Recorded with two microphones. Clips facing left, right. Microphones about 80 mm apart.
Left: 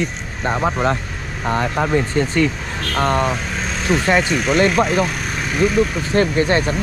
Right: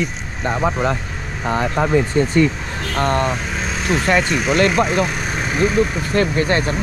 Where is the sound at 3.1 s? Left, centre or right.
Centre.